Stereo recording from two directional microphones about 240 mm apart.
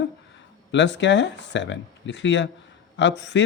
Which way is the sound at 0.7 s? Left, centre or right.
Left.